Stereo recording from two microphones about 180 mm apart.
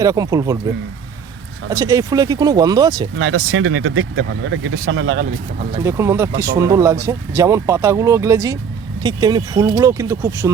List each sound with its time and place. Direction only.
0.0 s speech: 20° right (ahead or behind)
1.7 s speech: 15° right (ahead or behind)
3.2 s speech: 90° right
5.8 s speech: 15° right (ahead or behind)